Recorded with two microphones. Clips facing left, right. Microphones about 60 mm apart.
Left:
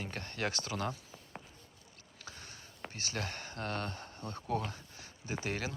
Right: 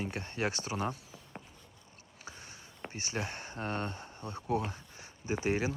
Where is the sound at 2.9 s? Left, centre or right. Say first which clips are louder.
Right 2 dB; centre.